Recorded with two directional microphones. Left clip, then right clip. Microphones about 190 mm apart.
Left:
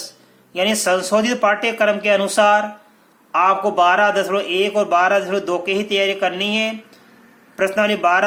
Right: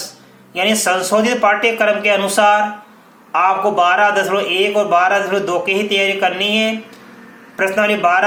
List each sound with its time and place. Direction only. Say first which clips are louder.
0.5 s speech: right 2 dB; 40° left (ahead or behind)